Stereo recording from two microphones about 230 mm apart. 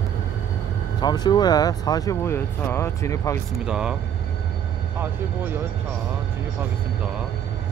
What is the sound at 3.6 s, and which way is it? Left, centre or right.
Speech, centre.